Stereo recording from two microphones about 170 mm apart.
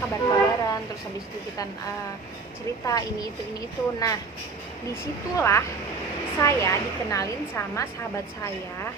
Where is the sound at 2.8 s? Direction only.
20° left (ahead or behind).